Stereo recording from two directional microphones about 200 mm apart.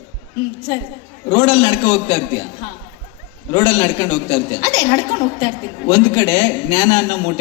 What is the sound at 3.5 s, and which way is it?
A woman's voice, 25° left (ahead or behind).